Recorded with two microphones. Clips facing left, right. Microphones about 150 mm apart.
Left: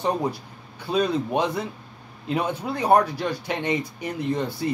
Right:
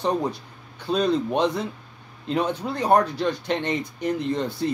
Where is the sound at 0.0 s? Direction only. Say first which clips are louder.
Even; 10° left (ahead or behind).